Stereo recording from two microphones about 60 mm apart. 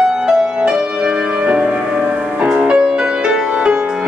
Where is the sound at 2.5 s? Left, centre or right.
Centre.